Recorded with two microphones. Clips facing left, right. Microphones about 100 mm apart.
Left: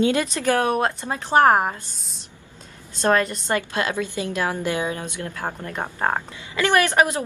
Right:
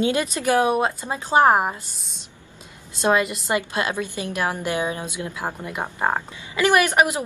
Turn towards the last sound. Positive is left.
turn(degrees=-15)  # may be behind; listen again after turning